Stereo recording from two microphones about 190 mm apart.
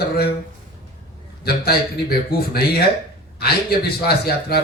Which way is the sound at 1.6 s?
55° left (ahead or behind).